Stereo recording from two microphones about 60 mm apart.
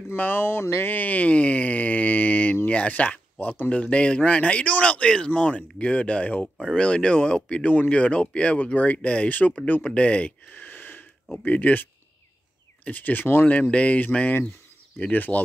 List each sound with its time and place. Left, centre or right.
0.1 s speech: left
0.7 s a sound: left
2.7 s speech: left
9.8 s a sound: centre
11.4 s speech: left
13.5 s speech: left